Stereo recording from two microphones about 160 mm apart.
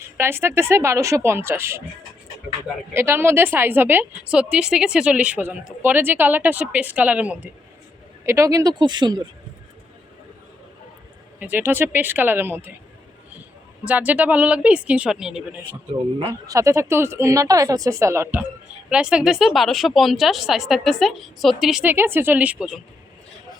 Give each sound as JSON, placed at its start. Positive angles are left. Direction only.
{"t": 0.2, "sound": "a woman's voice", "side_deg": -15}
{"t": 2.9, "sound": "a woman's voice", "side_deg": -15}
{"t": 11.3, "sound": "a woman's voice", "side_deg": -10}
{"t": 13.8, "sound": "a woman's voice", "side_deg": -10}
{"t": 16.5, "sound": "a woman's voice", "side_deg": -20}